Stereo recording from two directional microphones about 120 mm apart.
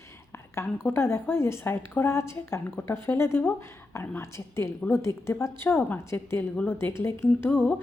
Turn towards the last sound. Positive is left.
turn(degrees=15)  # may be behind; listen again after turning